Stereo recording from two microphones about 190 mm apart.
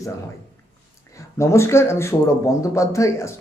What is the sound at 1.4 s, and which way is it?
Speech, 15° left (ahead or behind).